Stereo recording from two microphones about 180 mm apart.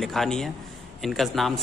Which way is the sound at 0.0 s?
Centre (ahead or behind).